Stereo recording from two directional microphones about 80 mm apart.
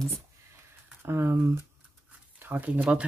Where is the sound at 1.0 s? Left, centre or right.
Right.